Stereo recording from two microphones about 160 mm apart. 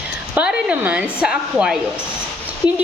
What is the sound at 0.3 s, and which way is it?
A woman's voice, 10° right (ahead or behind).